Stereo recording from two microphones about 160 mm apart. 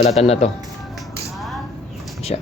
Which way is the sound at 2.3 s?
40° left (ahead or behind).